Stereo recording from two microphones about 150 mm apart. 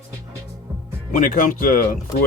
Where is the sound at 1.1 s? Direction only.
65° left (ahead or behind).